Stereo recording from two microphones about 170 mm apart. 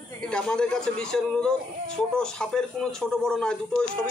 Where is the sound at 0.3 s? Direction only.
5° left (ahead or behind).